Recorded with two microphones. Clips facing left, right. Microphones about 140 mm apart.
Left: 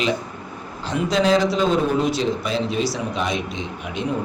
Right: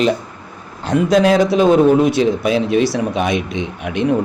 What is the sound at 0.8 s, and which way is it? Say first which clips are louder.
A man's voice: right 7 dB; 55° right (ahead or behind).